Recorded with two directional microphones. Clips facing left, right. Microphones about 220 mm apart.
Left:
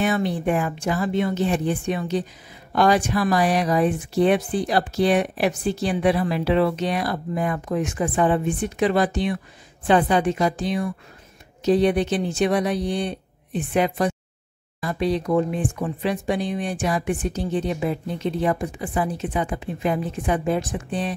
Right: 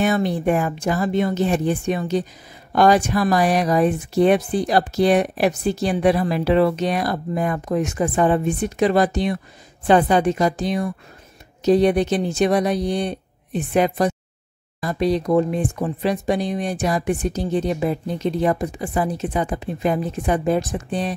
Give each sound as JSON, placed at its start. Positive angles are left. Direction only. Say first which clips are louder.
{"t": 0.0, "sound": "speech", "louder": "right 3 dB", "side_deg": -40}